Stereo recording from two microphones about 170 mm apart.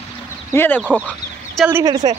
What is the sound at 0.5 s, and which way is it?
Speech, 10° left (ahead or behind).